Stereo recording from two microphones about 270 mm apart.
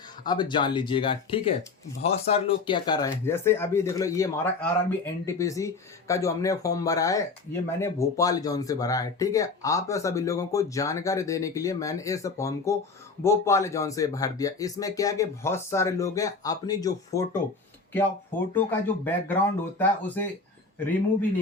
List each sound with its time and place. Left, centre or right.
0.3 s speech: centre
18.5 s speech: centre